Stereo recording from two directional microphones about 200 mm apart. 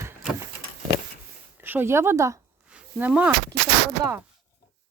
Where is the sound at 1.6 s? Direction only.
10° right (ahead or behind).